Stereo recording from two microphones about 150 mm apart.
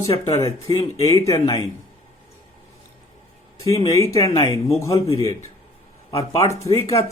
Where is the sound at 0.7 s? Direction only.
30° left (ahead or behind).